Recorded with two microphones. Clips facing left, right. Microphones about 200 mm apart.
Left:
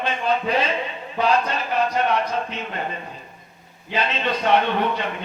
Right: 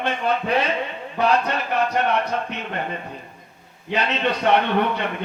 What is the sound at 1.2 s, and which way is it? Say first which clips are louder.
Speech: even; 60° right (ahead or behind).